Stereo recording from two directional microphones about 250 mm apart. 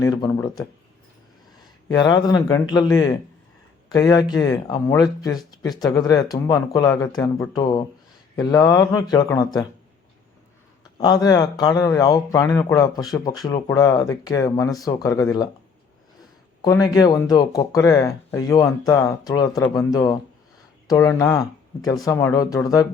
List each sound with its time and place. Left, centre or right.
0.0 s speech: centre
1.9 s speech: centre
10.9 s speech: centre
16.6 s speech: centre